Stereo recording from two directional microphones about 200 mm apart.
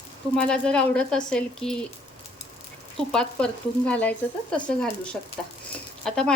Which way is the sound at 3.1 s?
5° left (ahead or behind).